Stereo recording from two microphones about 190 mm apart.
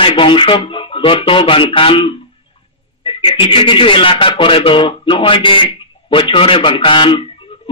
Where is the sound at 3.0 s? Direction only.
30° left (ahead or behind).